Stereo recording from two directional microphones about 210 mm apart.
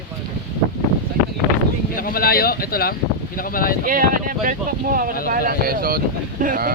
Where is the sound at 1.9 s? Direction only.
45° left (ahead or behind).